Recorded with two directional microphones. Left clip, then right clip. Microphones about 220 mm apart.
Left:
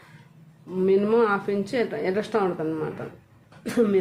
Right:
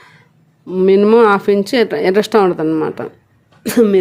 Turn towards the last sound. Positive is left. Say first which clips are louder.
# right 10 dB
turn(degrees=-50)  # may be behind; listen again after turning